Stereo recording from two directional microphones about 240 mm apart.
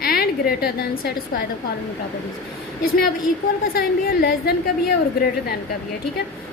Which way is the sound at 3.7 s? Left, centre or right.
Left.